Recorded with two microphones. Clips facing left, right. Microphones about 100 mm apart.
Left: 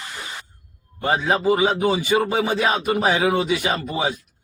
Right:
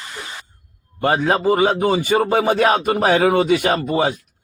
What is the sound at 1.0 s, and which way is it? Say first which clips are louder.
A man's voice: right 3 dB; 55° right (ahead or behind).